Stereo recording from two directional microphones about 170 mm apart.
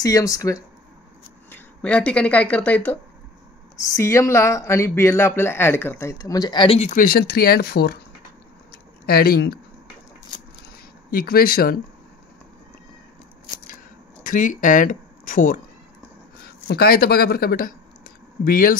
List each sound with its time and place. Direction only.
0.0 s speech: 20° left (ahead or behind)
1.5 s speech: 5° left (ahead or behind); by 6.9 s 30° left (ahead or behind)
6.9 s speech: 55° left (ahead or behind)
9.0 s speech: 65° left (ahead or behind)
11.1 s speech: 60° left (ahead or behind)
14.2 s speech: 50° left (ahead or behind)
16.4 s speech: 65° left (ahead or behind)